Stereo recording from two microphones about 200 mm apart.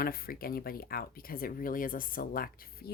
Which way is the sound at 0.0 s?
45° left (ahead or behind).